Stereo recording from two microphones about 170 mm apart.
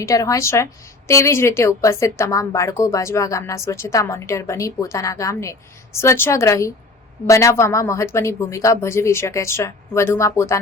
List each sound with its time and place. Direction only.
0.0 s a woman's voice: 20° left (ahead or behind)